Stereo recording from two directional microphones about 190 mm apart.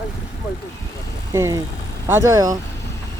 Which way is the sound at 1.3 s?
15° right (ahead or behind).